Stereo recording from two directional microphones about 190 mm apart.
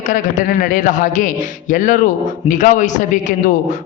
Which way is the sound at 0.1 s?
45° left (ahead or behind).